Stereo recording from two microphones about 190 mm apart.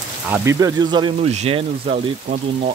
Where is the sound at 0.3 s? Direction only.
15° right (ahead or behind).